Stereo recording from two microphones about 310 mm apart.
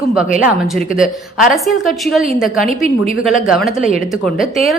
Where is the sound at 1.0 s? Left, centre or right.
Centre.